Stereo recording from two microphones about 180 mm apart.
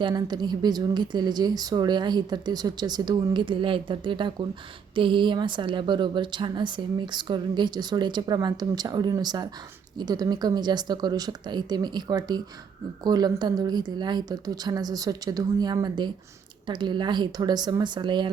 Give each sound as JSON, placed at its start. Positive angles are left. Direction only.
{"t": 0.0, "sound": "speech", "side_deg": -25}